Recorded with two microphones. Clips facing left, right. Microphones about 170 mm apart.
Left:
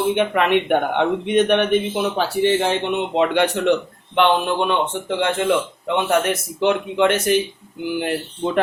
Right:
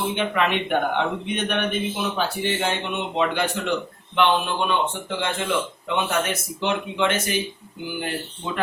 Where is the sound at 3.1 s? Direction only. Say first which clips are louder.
Left 5 dB; 65° left (ahead or behind).